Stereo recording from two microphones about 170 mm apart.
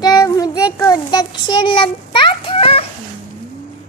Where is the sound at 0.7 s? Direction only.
20° left (ahead or behind).